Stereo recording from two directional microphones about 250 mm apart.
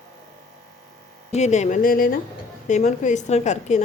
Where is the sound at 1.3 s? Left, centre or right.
Left.